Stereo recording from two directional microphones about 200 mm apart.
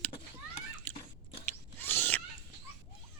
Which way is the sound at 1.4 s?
10° left (ahead or behind).